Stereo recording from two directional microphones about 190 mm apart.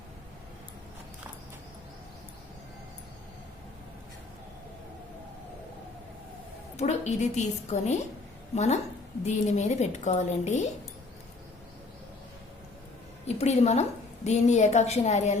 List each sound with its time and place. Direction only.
6.7 s a woman's voice: 35° left (ahead or behind)
13.2 s a woman's voice: 35° left (ahead or behind)